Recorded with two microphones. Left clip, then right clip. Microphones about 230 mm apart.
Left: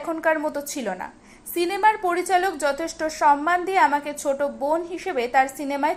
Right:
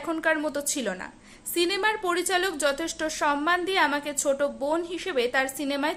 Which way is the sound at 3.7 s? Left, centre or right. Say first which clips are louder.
Left 5 dB; centre.